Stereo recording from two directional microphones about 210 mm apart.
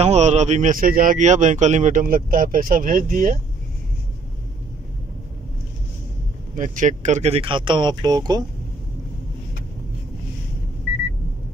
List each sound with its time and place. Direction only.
0.0 s speech: 30° right (ahead or behind)
6.5 s speech: 35° right (ahead or behind); by 8.5 s 20° right (ahead or behind)